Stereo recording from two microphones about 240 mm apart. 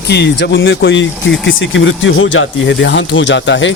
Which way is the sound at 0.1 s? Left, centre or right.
Left.